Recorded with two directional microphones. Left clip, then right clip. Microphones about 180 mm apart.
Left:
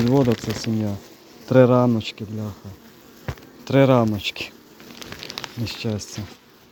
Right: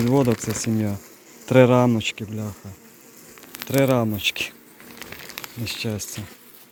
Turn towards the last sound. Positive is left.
turn(degrees=10)  # may be behind; listen again after turning